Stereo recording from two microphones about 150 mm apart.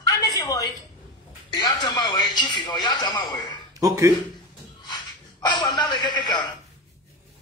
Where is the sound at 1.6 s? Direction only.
25° left (ahead or behind).